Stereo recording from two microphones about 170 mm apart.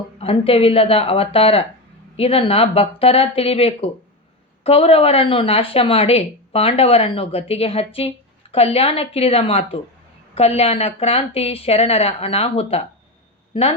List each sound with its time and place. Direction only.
0.2 s speech: 35° left (ahead or behind)